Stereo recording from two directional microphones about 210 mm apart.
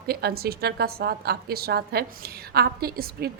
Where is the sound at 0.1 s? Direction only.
50° right (ahead or behind).